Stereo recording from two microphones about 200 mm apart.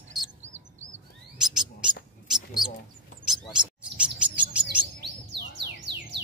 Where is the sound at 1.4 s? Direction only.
5° right (ahead or behind).